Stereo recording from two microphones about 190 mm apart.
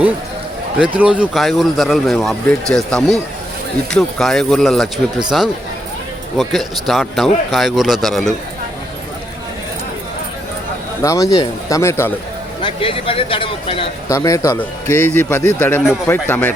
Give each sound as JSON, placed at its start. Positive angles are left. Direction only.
{"t": 0.8, "sound": "speech", "side_deg": -5}
{"t": 6.3, "sound": "speech", "side_deg": 0}
{"t": 11.0, "sound": "speech", "side_deg": 15}
{"t": 12.6, "sound": "speech", "side_deg": 30}
{"t": 14.1, "sound": "speech", "side_deg": 15}